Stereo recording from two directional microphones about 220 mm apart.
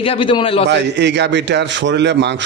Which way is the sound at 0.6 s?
50° right (ahead or behind).